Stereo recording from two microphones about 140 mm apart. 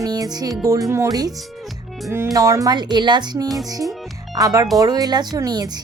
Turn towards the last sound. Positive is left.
turn(degrees=-30)  # may be behind; listen again after turning